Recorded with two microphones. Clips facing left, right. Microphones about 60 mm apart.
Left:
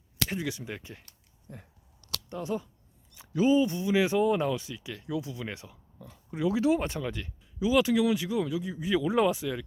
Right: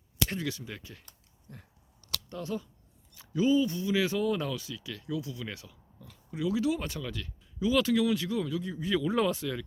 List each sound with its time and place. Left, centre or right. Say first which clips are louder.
0.3 s speech: left 2 dB; centre
7.6 s speech: left 2 dB; centre